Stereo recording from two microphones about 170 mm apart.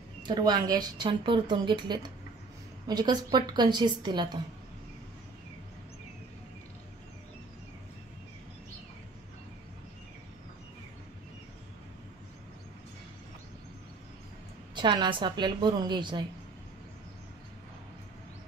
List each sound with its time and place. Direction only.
0.2 s speech: 25° right (ahead or behind)
14.8 s speech: 25° right (ahead or behind)